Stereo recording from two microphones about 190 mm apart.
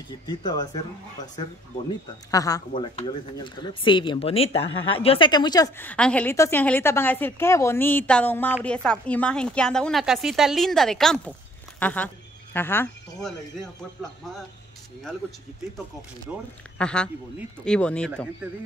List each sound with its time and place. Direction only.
0.3 s speech: 20° left (ahead or behind)
2.3 s speech: 20° left (ahead or behind)
5.9 s a woman's voice: 5° left (ahead or behind)
16.3 s speech: 5° right (ahead or behind)
16.7 s a woman's voice: 5° left (ahead or behind)
18.4 s a woman's voice: 5° right (ahead or behind)